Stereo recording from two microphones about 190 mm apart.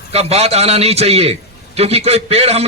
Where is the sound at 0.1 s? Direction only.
30° right (ahead or behind).